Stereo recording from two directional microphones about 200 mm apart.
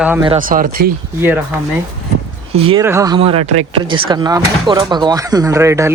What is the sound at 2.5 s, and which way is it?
Speech, 30° right (ahead or behind).